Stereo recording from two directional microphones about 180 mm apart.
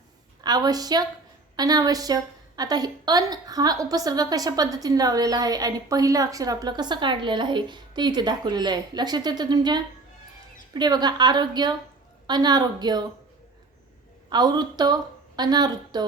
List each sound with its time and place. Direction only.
0.4 s a woman's voice: 20° right (ahead or behind)
14.3 s a woman's voice: 25° right (ahead or behind)